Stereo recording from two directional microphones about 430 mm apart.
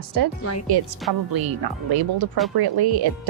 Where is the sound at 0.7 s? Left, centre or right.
Right.